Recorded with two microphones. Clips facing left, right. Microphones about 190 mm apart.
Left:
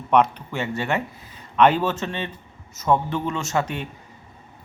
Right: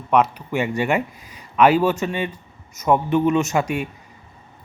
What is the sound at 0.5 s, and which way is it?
Speech, 15° right (ahead or behind).